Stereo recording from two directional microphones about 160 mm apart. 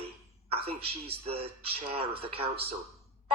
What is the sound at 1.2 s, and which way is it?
A man's voice, 40° right (ahead or behind).